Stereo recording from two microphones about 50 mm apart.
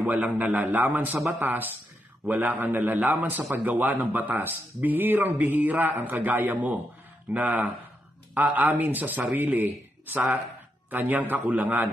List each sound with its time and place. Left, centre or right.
0.0 s a man's voice: right
2.2 s a man's voice: right